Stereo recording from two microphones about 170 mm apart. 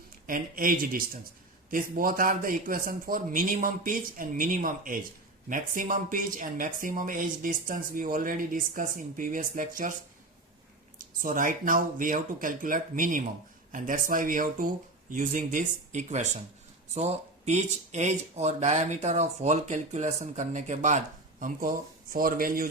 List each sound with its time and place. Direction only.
0.3 s a man's voice: 55° right (ahead or behind)
10.9 s speech: 55° right (ahead or behind)